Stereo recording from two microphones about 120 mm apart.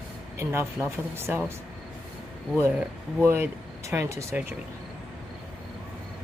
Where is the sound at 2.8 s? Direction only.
15° right (ahead or behind).